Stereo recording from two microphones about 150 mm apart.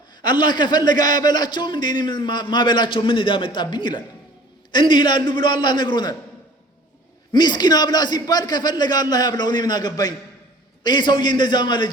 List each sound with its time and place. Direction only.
0.2 s a man's voice: 30° left (ahead or behind)
7.3 s a man's voice: 30° left (ahead or behind)